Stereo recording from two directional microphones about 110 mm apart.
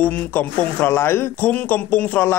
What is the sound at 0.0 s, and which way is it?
Speech, 15° left (ahead or behind).